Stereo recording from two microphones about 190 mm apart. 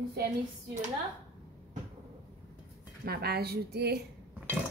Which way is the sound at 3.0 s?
55° right (ahead or behind).